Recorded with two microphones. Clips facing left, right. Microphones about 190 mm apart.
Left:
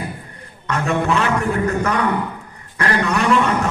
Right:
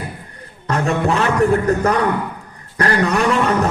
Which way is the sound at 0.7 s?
35° right (ahead or behind).